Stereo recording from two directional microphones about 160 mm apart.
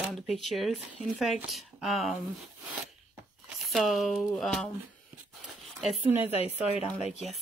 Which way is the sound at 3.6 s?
Centre (ahead or behind).